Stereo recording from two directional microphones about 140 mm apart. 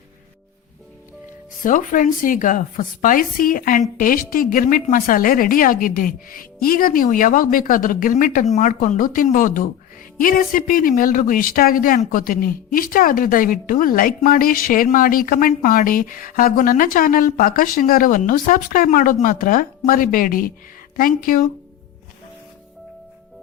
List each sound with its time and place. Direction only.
1.6 s a woman's voice: 70° left (ahead or behind); by 21.4 s 90° left